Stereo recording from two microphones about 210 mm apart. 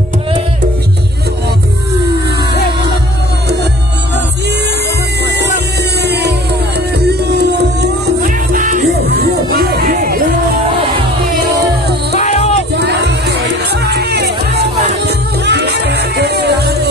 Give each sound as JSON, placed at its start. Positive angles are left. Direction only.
{"t": 6.0, "sound": "music", "side_deg": -50}
{"t": 7.3, "sound": "music", "side_deg": -45}
{"t": 9.1, "sound": "music", "side_deg": -50}
{"t": 12.2, "sound": "music", "side_deg": 30}
{"t": 12.7, "sound": "music", "side_deg": -55}